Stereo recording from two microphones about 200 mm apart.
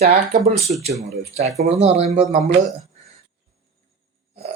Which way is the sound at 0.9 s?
35° right (ahead or behind).